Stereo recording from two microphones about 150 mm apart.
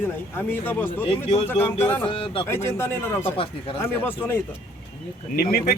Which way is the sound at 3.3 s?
35° left (ahead or behind).